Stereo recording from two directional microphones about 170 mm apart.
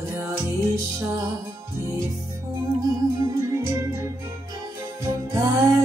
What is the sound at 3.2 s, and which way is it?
Music, 20° right (ahead or behind).